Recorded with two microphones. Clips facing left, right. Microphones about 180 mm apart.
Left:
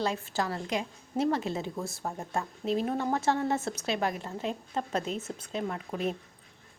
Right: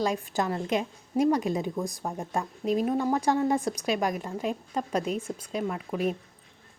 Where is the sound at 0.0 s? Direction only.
15° right (ahead or behind).